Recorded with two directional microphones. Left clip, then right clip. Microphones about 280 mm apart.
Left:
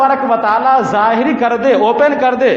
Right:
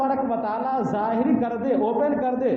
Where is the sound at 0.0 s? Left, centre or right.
Left.